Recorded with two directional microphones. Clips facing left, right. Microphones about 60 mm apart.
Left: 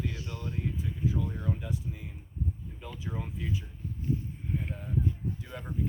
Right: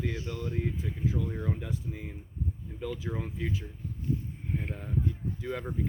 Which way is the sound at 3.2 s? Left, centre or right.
Right.